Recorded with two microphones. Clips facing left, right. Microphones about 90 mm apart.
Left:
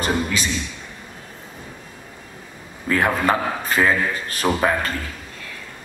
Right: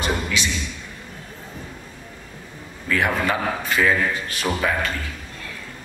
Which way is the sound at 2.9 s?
40° left (ahead or behind).